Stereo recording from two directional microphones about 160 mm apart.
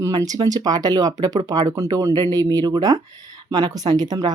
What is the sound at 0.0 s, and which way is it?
Speech, 25° right (ahead or behind).